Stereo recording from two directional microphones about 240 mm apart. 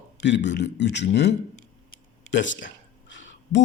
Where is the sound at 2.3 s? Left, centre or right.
Left.